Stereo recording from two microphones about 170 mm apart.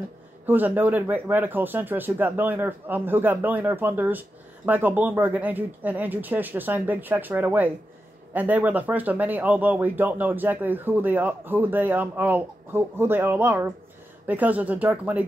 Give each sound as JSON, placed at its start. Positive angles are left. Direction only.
{"t": 0.5, "sound": "speech", "side_deg": -10}